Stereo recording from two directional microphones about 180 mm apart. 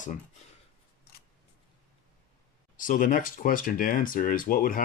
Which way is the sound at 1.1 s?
60° left (ahead or behind).